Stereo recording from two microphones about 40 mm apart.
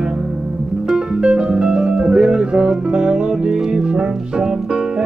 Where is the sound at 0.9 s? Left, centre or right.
Right.